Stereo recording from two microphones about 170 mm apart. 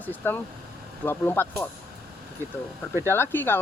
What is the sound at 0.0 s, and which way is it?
Speech, 10° left (ahead or behind).